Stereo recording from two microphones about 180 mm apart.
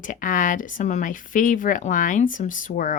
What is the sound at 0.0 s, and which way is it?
Speech, 45° left (ahead or behind).